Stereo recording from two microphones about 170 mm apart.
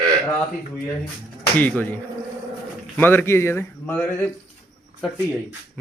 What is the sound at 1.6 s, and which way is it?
Speech, 10° left (ahead or behind).